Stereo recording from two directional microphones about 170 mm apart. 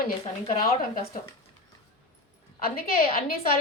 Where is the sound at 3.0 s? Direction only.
60° left (ahead or behind).